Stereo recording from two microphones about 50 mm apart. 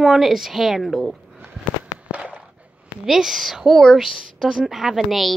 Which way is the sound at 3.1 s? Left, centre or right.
Centre.